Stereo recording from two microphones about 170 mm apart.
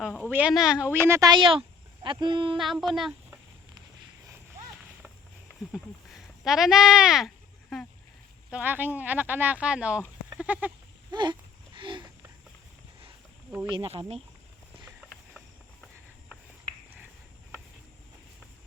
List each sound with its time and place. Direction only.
0.3 s speech: 10° right (ahead or behind)
1.0 s speech: 20° right (ahead or behind)
2.6 s speech: centre (ahead or behind)
5.7 s sheep: centre (ahead or behind)
8.4 s speech: 10° right (ahead or behind)
10.2 s sheep: 10° right (ahead or behind)
11.1 s a sound: 25° right (ahead or behind)
13.7 s speech: 30° right (ahead or behind)